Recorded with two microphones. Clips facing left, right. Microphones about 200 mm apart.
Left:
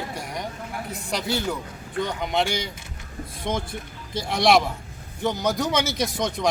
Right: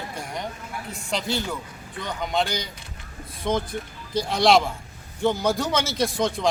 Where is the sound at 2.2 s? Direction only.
15° left (ahead or behind).